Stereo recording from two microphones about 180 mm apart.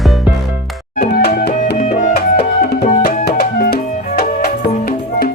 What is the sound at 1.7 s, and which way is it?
Music, 45° left (ahead or behind).